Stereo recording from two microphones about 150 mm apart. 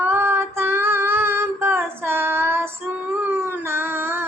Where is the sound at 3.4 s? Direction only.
15° right (ahead or behind).